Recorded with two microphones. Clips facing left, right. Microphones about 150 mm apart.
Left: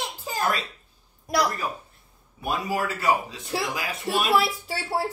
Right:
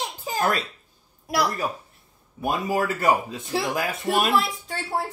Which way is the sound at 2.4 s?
50° right (ahead or behind).